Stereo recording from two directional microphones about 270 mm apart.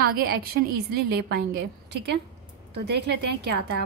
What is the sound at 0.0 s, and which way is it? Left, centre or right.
A woman's voice, right.